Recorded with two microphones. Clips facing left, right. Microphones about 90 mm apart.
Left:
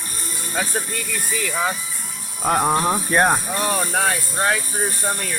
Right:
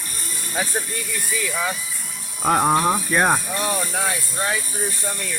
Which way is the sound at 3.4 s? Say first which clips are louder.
Left 2 dB; 45° left (ahead or behind).